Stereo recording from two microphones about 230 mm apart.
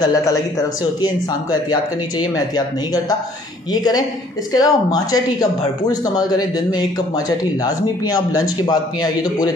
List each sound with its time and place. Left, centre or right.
0.0 s speech: centre
1.7 s speech: centre